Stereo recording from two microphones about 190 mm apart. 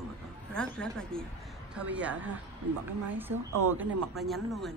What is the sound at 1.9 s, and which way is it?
A woman's voice, 10° right (ahead or behind).